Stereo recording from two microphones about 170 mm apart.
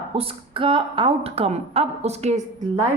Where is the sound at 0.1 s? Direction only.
35° right (ahead or behind).